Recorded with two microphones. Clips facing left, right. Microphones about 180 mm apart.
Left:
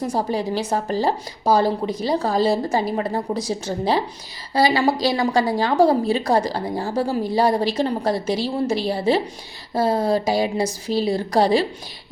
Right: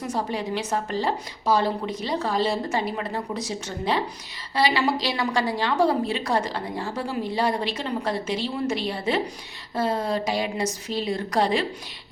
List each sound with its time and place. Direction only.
0.0 s a woman's voice: 35° left (ahead or behind)